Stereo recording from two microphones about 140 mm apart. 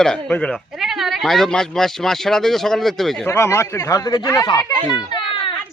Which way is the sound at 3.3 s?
20° left (ahead or behind).